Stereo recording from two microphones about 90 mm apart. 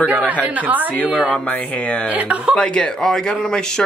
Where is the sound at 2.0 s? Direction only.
15° right (ahead or behind).